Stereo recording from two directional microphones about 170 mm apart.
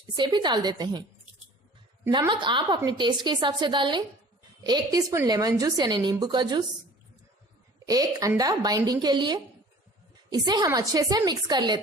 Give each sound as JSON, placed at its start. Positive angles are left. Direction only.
{"t": 0.2, "sound": "a woman's voice", "side_deg": -25}
{"t": 2.0, "sound": "a woman's voice", "side_deg": -25}
{"t": 7.9, "sound": "a woman's voice", "side_deg": -20}